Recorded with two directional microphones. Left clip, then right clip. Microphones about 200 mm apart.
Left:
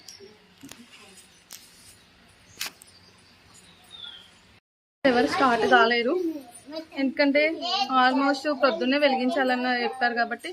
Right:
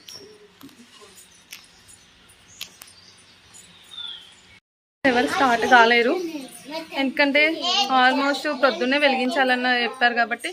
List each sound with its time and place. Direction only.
5.0 s a child's voice: 5° left (ahead or behind)